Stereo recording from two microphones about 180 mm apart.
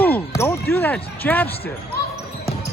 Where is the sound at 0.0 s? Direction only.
10° left (ahead or behind).